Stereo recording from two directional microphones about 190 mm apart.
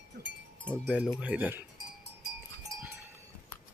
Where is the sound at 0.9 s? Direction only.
5° right (ahead or behind).